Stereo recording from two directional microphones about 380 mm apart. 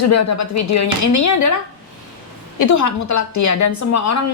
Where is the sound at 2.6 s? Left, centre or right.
Left.